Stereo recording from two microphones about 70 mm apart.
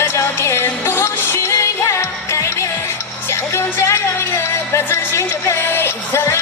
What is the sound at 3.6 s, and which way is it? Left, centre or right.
A woman's voice, left.